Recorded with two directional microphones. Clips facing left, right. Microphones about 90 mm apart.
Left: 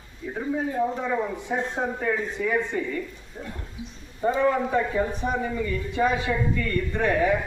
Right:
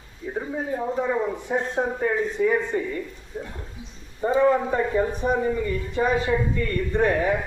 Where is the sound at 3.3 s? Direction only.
5° right (ahead or behind).